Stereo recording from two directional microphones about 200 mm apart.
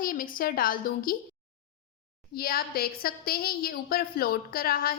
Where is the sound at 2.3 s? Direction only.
50° left (ahead or behind).